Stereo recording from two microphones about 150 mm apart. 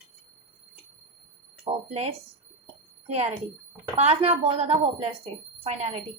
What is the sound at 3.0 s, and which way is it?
A woman's voice, 45° right (ahead or behind).